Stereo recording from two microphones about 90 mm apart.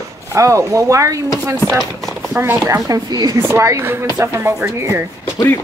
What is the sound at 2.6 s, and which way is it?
Speech, 40° right (ahead or behind).